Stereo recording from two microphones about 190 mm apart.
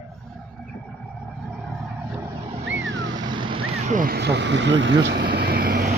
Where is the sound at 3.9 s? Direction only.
45° right (ahead or behind).